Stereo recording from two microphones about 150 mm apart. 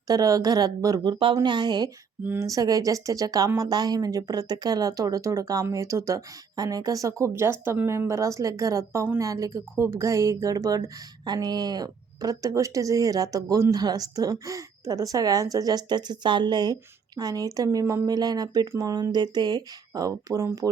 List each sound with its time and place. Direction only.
0.1 s speech: 25° right (ahead or behind)
2.2 s speech: 15° right (ahead or behind)